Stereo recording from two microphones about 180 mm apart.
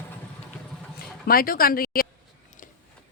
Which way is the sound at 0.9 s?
55° left (ahead or behind).